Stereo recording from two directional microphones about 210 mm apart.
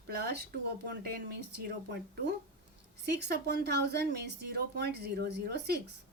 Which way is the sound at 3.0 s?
50° right (ahead or behind).